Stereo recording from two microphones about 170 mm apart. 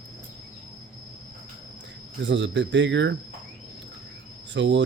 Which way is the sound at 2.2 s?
90° right.